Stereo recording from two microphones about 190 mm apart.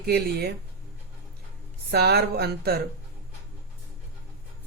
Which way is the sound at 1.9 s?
55° right (ahead or behind).